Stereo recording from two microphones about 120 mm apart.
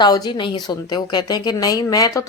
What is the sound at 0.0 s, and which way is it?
Speech, 35° left (ahead or behind).